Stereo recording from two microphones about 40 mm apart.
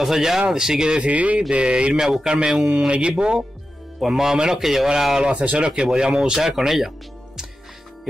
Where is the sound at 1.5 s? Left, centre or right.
Right.